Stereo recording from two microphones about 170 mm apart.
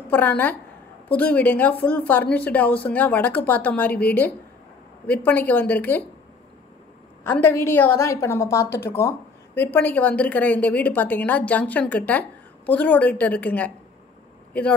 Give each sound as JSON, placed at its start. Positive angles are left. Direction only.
{"t": 0.1, "sound": "a woman's voice", "side_deg": 10}
{"t": 7.2, "sound": "a woman's voice", "side_deg": 10}